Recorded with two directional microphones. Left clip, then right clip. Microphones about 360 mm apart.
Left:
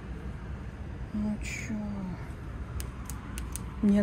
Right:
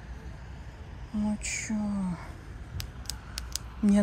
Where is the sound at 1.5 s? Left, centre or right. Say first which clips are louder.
Right 3 dB; centre.